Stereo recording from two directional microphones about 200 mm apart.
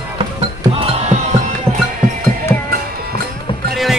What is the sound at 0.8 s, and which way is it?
Music, 35° right (ahead or behind).